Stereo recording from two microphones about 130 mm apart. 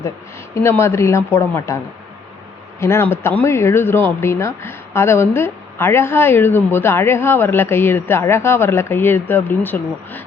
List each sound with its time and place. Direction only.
0.5 s a woman's voice: 20° left (ahead or behind)
2.8 s speech: 20° left (ahead or behind)